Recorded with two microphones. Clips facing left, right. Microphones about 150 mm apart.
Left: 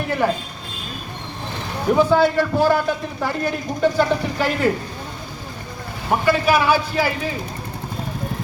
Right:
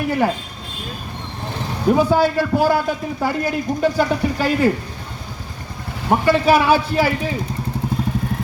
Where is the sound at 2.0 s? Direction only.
10° right (ahead or behind).